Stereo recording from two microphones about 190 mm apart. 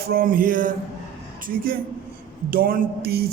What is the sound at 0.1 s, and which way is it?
Speech, 50° right (ahead or behind).